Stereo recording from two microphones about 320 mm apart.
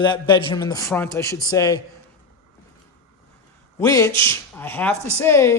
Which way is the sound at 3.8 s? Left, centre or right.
Centre.